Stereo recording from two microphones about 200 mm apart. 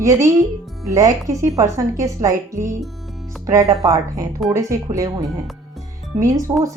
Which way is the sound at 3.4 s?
15° right (ahead or behind).